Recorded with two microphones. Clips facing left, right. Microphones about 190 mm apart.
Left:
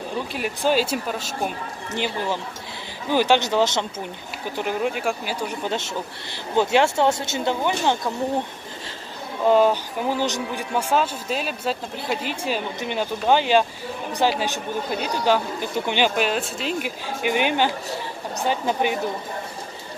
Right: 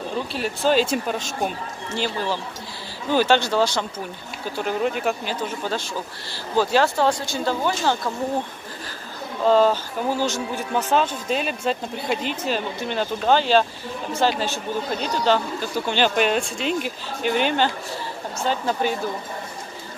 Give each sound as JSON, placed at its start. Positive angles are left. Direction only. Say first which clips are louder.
{"t": 0.3, "sound": "speech", "louder": "right 1 dB", "side_deg": 15}
{"t": 2.0, "sound": "speech", "louder": "even", "side_deg": 15}
{"t": 9.4, "sound": "speech", "louder": "even", "side_deg": 15}
{"t": 16.2, "sound": "speech", "louder": "right 2 dB", "side_deg": 5}